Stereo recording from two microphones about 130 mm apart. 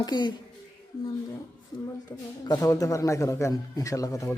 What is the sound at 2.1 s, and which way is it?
A man's voice, 20° left (ahead or behind).